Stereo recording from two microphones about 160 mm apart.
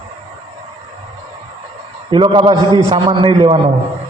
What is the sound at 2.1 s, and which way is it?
A man's voice, 30° right (ahead or behind).